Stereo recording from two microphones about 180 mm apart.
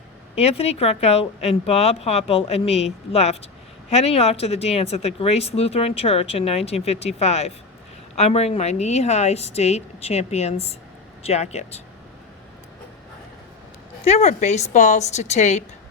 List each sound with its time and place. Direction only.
0.3 s a woman's voice: 35° left (ahead or behind)
14.0 s a woman's voice: 35° left (ahead or behind)